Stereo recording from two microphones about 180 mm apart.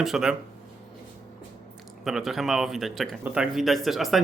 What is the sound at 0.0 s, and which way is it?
Speech, centre (ahead or behind).